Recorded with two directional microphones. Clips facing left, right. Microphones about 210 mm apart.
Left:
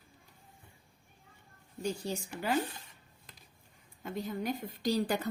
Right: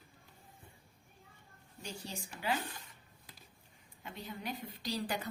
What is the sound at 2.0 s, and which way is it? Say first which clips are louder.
Speech: left 5 dB; 45° left (ahead or behind).